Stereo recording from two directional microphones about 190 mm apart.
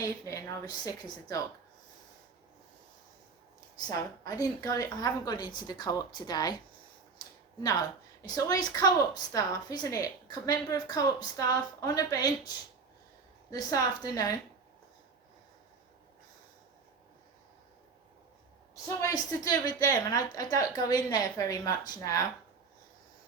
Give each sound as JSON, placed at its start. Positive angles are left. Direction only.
{"t": 0.0, "sound": "speech", "side_deg": 15}
{"t": 3.8, "sound": "a woman's voice", "side_deg": 20}
{"t": 7.2, "sound": "a sound", "side_deg": 20}
{"t": 7.6, "sound": "a woman's voice", "side_deg": 20}
{"t": 13.5, "sound": "a woman's voice", "side_deg": 20}
{"t": 18.9, "sound": "a woman's voice", "side_deg": 20}